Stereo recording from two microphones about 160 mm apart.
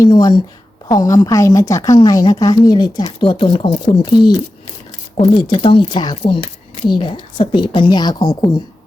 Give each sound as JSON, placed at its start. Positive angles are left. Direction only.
{"t": 0.0, "sound": "a woman's voice", "side_deg": 25}